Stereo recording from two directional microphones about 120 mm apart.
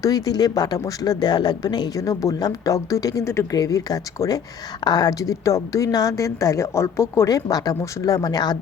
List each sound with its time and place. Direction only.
0.0 s a woman's voice: 30° left (ahead or behind)